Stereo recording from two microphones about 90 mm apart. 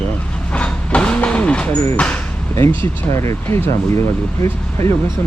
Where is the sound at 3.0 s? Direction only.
30° left (ahead or behind).